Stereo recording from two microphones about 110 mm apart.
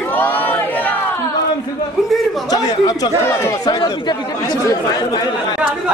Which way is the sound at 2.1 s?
Centre (ahead or behind).